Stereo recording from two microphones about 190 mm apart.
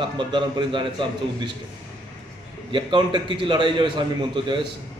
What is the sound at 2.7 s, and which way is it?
A man's voice, 25° right (ahead or behind).